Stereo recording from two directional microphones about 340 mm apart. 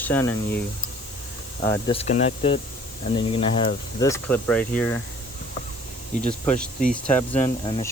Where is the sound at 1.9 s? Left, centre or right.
Centre.